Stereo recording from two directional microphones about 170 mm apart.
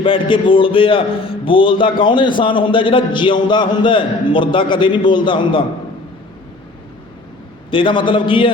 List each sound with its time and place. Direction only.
0.0 s a man's voice: 30° left (ahead or behind)
7.7 s a man's voice: 30° left (ahead or behind)